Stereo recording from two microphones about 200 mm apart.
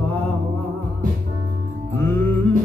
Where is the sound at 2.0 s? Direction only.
10° left (ahead or behind).